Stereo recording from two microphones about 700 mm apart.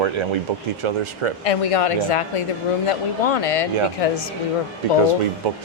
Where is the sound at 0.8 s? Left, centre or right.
Right.